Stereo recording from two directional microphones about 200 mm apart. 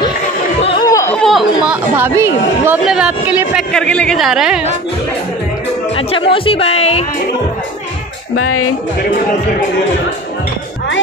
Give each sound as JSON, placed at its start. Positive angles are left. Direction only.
{"t": 0.6, "sound": "chatter", "side_deg": 25}
{"t": 1.1, "sound": "chatter", "side_deg": 0}
{"t": 2.0, "sound": "speech", "side_deg": -10}
{"t": 5.9, "sound": "speech", "side_deg": 25}
{"t": 8.4, "sound": "speech", "side_deg": 90}